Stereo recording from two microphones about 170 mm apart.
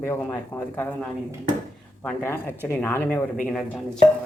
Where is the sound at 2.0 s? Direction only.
15° left (ahead or behind).